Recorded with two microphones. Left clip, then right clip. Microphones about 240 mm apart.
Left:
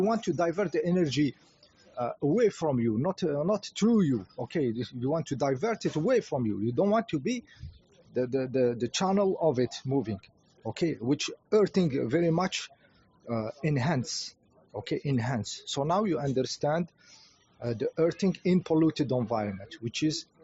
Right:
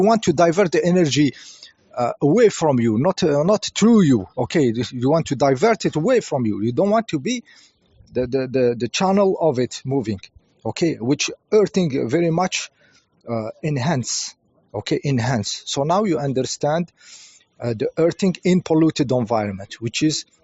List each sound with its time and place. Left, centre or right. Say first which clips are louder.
0.0 s speech: right 12 dB; right